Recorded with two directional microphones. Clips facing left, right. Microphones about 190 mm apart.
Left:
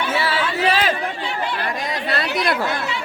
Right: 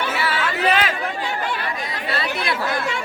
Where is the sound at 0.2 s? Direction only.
30° left (ahead or behind).